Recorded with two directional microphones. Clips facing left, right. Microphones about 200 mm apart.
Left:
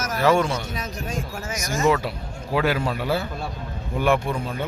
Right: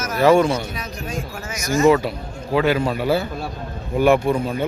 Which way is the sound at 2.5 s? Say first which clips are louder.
Right 4 dB; 5° left (ahead or behind).